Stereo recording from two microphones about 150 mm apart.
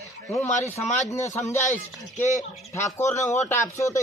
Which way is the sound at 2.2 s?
55° left (ahead or behind).